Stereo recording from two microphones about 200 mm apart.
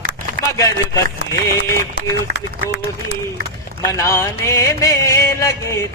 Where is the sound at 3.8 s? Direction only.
15° left (ahead or behind).